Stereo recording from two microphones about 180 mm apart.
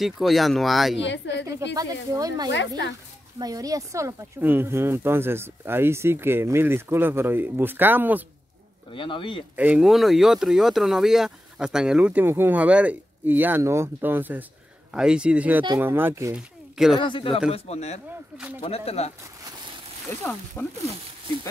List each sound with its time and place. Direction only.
0.0 s speech: centre (ahead or behind)
1.0 s a woman's voice: 80° left
2.1 s speech: 20° right (ahead or behind)
8.9 s speech: 30° left (ahead or behind)
9.6 s speech: 5° right (ahead or behind)
16.3 s speech: centre (ahead or behind)
17.0 s speech: 30° left (ahead or behind)
20.1 s speech: 15° left (ahead or behind)